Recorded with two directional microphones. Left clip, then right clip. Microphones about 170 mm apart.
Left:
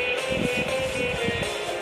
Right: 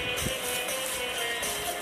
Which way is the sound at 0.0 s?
35° left (ahead or behind).